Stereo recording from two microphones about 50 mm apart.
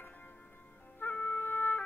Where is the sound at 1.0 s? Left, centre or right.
Left.